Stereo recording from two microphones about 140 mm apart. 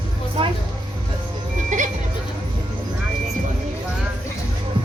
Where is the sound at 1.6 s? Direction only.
65° right (ahead or behind).